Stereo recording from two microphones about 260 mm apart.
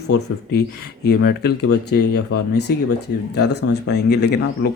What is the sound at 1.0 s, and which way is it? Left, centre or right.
Speech, left.